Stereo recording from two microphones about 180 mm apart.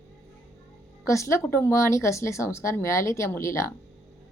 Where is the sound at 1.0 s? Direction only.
15° left (ahead or behind).